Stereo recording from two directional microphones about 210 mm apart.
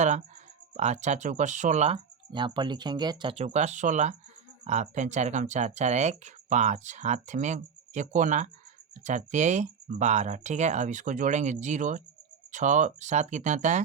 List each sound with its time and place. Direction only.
0.0 s speech: 35° right (ahead or behind)